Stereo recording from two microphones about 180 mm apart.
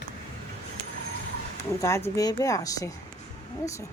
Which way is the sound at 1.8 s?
15° left (ahead or behind).